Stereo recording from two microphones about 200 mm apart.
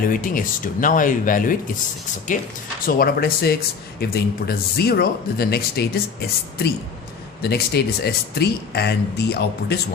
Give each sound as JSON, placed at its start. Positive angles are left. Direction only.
{"t": 0.1, "sound": "speech", "side_deg": 45}
{"t": 2.8, "sound": "speech", "side_deg": 50}